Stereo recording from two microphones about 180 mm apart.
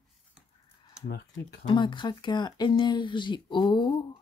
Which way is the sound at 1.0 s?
70° left (ahead or behind).